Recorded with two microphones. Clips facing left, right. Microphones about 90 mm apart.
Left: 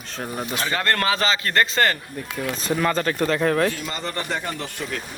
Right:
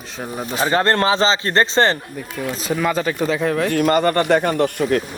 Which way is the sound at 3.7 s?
60° right (ahead or behind).